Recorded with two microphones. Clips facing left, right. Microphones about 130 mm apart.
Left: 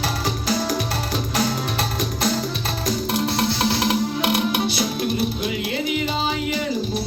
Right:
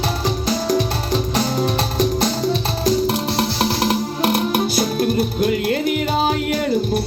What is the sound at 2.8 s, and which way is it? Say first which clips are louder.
Music: right 5 dB; 35° right (ahead or behind).